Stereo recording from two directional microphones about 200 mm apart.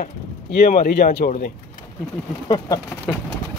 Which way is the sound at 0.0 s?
45° left (ahead or behind).